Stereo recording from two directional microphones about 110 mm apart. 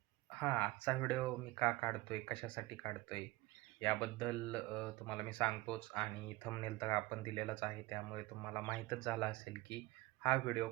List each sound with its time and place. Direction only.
0.3 s speech: 20° left (ahead or behind)